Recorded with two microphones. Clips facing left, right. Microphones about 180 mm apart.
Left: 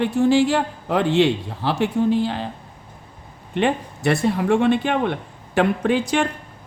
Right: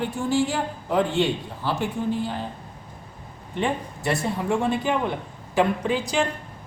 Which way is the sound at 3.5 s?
70° left (ahead or behind).